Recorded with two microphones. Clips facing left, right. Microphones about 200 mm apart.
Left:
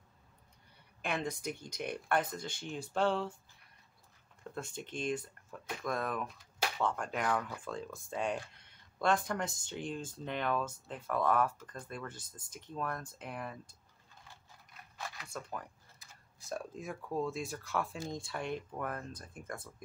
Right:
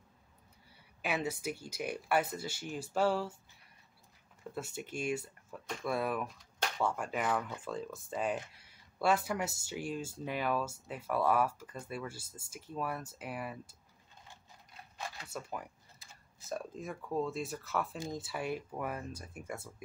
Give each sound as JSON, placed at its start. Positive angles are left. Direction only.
{"t": 1.0, "sound": "speech", "side_deg": -5}
{"t": 4.4, "sound": "speech", "side_deg": -5}
{"t": 15.2, "sound": "speech", "side_deg": -10}